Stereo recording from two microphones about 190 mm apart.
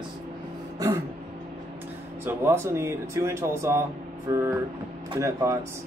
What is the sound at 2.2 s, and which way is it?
Speech, 10° right (ahead or behind).